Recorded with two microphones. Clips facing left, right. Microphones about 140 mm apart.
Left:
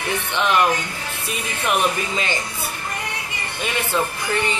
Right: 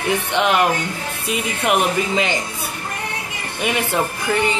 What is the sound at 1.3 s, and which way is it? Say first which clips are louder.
Speech: right 4 dB; 20° right (ahead or behind).